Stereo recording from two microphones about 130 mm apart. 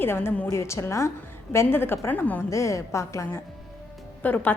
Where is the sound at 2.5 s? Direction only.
25° left (ahead or behind).